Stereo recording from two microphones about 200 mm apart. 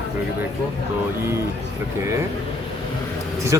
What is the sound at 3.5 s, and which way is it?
Speech, 15° right (ahead or behind).